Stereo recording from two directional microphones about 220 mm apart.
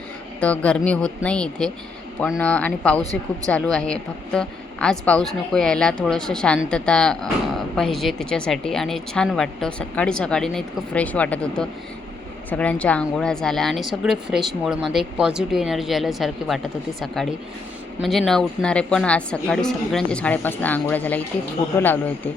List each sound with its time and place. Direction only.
0.3 s a woman's voice: 5° left (ahead or behind)